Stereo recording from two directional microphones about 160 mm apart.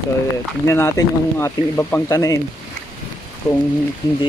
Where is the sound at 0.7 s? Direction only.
15° left (ahead or behind).